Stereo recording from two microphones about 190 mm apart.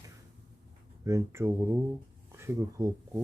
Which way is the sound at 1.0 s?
15° right (ahead or behind).